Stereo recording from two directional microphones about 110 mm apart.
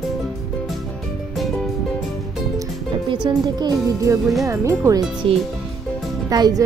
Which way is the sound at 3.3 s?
35° right (ahead or behind).